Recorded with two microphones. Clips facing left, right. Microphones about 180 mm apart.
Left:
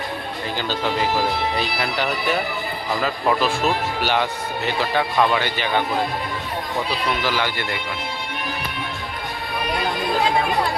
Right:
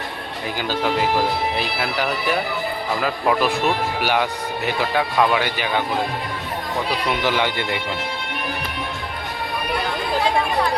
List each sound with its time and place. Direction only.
1.5 s a man's voice: 5° right (ahead or behind)
7.1 s speech: 20° right (ahead or behind)